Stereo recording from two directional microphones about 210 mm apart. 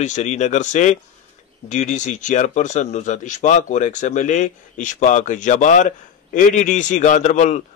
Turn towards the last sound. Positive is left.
turn(degrees=35)  # may be behind; listen again after turning